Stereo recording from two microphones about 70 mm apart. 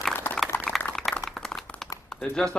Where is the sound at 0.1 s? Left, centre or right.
Left.